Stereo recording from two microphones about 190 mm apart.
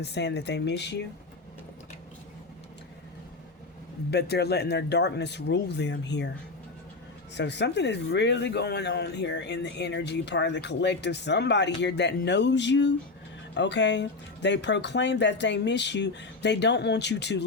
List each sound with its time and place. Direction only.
0.0 s speech: 65° left (ahead or behind)
4.1 s speech: 60° left (ahead or behind)
7.3 s speech: 65° left (ahead or behind)